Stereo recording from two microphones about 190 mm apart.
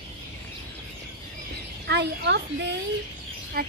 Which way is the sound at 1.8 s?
65° right (ahead or behind).